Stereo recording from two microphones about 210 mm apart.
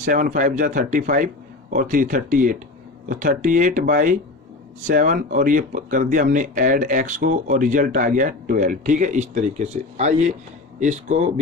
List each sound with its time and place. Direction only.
0.0 s speech: 40° right (ahead or behind)